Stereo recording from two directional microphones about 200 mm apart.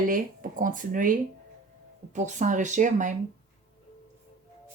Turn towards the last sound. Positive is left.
turn(degrees=-40)  # may be behind; listen again after turning